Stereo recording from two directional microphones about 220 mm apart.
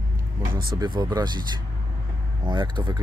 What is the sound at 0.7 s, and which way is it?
Speech, 20° right (ahead or behind).